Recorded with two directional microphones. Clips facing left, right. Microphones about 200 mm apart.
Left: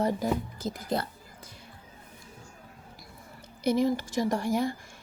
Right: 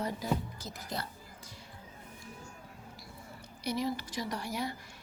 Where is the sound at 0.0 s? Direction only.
50° left (ahead or behind).